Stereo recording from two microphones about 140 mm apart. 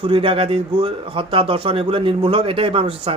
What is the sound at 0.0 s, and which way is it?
A man's voice, 40° right (ahead or behind).